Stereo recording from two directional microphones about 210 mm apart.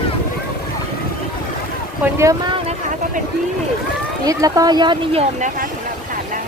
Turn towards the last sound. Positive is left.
turn(degrees=-20)  # may be behind; listen again after turning